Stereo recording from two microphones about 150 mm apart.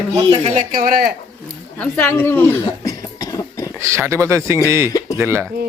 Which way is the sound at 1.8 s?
10° left (ahead or behind).